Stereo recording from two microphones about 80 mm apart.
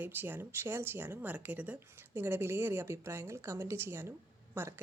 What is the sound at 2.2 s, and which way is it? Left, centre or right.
A woman's voice, right.